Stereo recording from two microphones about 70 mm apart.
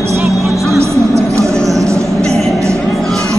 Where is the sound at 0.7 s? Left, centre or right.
Right.